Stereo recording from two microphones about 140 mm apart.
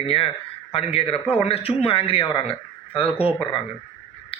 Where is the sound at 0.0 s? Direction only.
40° left (ahead or behind).